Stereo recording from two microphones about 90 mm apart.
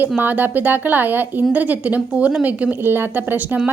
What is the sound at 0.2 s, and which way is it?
A woman's voice, 20° right (ahead or behind).